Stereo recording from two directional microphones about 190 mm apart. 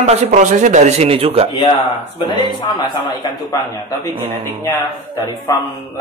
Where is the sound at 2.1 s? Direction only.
25° left (ahead or behind).